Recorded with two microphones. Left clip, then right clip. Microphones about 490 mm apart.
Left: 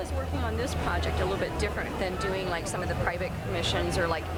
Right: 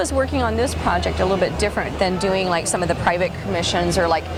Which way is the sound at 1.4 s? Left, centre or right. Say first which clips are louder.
Right 10 dB; right.